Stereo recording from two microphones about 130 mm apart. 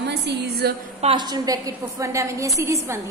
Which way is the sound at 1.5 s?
30° right (ahead or behind).